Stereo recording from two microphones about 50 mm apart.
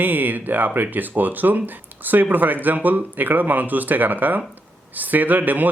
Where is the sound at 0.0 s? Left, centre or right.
Right.